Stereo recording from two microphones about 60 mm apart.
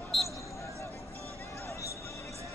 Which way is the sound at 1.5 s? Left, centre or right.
Left.